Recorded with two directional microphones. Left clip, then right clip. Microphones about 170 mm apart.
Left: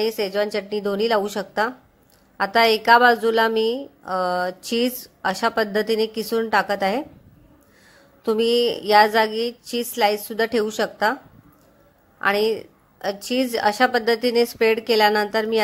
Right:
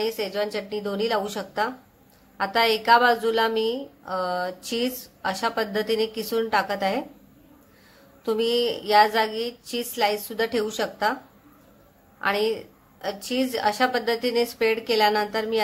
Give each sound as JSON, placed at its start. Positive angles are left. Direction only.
{"t": 0.0, "sound": "a woman's voice", "side_deg": 40}
{"t": 8.3, "sound": "a woman's voice", "side_deg": 40}
{"t": 12.2, "sound": "a woman's voice", "side_deg": 40}